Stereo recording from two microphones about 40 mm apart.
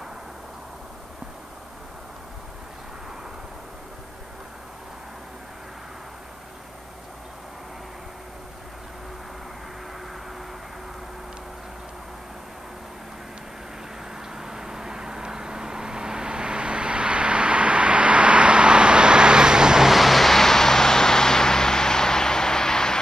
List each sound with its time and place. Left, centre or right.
14.3 s vehicle: centre
19.9 s vehicle: centre